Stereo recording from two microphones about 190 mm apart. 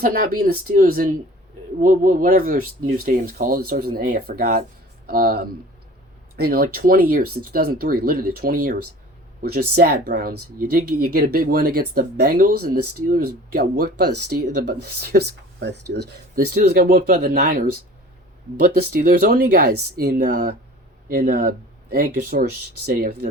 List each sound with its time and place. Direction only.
0.0 s speech: 50° right (ahead or behind)
18.9 s speech: 50° right (ahead or behind)